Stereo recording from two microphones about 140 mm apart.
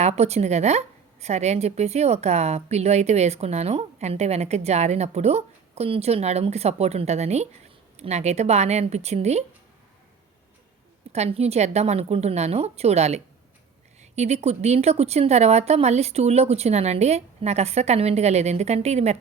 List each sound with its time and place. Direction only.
0.0 s a woman's voice: 50° right (ahead or behind)
11.1 s a woman's voice: 50° right (ahead or behind)